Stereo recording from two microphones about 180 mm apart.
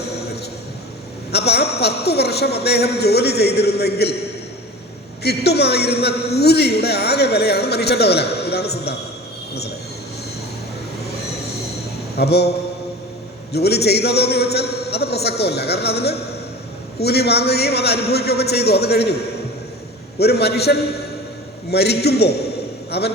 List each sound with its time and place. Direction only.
1.3 s a man's voice: 65° left (ahead or behind)
5.2 s a man's voice: 65° left (ahead or behind)
12.1 s mantra: 65° left (ahead or behind)
13.5 s a man's voice: 65° left (ahead or behind)